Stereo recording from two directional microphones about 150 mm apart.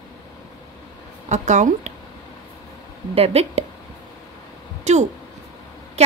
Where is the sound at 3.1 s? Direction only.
45° right (ahead or behind).